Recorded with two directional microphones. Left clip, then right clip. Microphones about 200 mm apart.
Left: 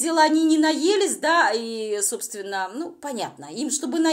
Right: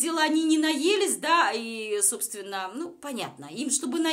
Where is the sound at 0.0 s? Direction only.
20° left (ahead or behind).